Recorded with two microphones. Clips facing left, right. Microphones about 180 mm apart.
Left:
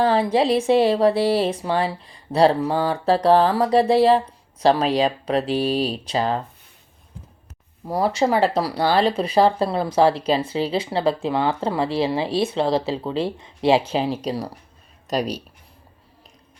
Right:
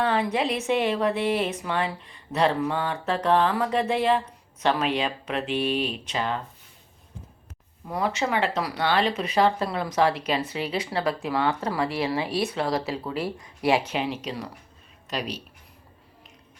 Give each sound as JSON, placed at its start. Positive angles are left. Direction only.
{"t": 0.0, "sound": "speech", "side_deg": 30}
{"t": 7.9, "sound": "speech", "side_deg": 35}